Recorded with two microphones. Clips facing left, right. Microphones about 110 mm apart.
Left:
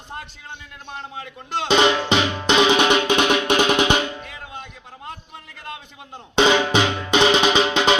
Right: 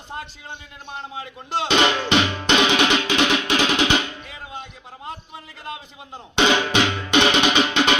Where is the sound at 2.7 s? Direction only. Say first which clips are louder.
Left 3 dB; 45° left (ahead or behind).